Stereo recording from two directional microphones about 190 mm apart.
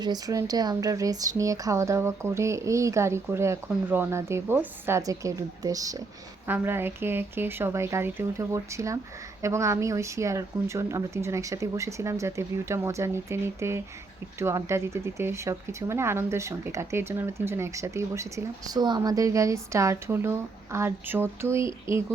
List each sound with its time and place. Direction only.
0.0 s speech: 20° right (ahead or behind)